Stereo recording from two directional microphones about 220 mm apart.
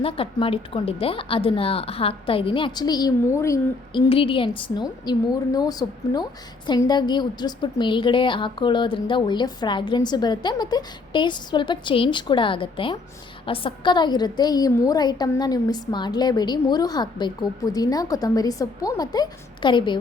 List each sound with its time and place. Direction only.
0.0 s a woman's voice: 25° left (ahead or behind)
4.1 s a woman's voice: 25° left (ahead or behind)